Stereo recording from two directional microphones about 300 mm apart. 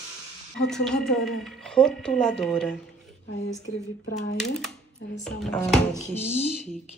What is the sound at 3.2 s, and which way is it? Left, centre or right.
Speech, left.